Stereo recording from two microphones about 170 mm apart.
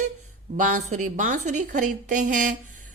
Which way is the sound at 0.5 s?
50° right (ahead or behind).